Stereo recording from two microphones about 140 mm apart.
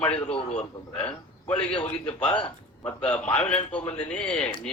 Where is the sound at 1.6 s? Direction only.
5° left (ahead or behind).